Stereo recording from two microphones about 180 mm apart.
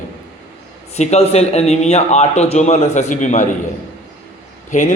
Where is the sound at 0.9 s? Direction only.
35° left (ahead or behind).